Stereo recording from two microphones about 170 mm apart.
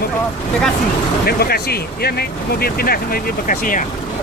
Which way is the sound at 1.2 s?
65° left (ahead or behind).